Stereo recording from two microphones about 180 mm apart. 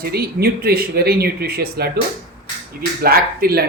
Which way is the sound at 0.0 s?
60° right (ahead or behind).